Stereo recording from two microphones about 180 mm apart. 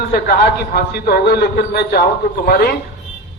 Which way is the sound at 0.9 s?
60° left (ahead or behind).